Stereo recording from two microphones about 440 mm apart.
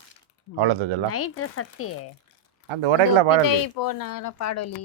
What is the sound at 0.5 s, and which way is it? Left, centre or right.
Speech, right.